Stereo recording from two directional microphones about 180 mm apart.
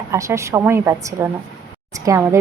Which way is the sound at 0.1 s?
15° right (ahead or behind).